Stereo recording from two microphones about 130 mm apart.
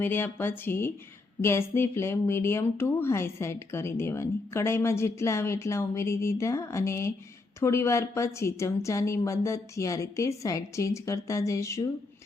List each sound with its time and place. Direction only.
0.0 s speech: 15° left (ahead or behind)